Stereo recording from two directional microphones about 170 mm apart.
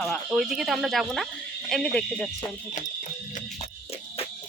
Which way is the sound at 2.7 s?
45° left (ahead or behind).